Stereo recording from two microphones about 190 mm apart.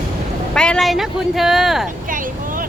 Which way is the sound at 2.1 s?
45° right (ahead or behind).